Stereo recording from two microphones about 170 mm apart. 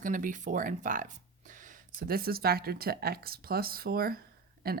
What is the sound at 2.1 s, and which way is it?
Speech, 60° right (ahead or behind).